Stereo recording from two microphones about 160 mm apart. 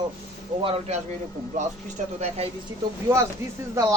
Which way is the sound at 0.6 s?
35° right (ahead or behind).